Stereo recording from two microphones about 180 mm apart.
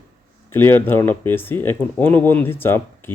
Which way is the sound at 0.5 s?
10° left (ahead or behind).